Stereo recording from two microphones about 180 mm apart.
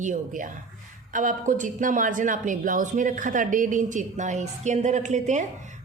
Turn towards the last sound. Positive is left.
turn(degrees=-40)  # may be behind; listen again after turning